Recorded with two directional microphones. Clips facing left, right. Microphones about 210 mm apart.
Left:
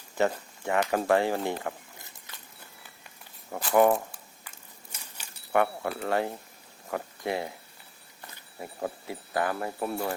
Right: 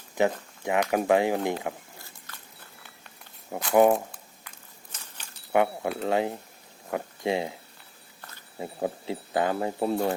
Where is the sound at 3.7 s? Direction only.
20° right (ahead or behind).